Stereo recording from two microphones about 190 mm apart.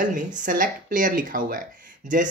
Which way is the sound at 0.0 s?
45° right (ahead or behind).